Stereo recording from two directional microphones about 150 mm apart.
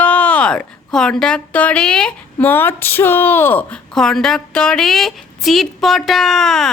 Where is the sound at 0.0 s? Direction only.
10° left (ahead or behind).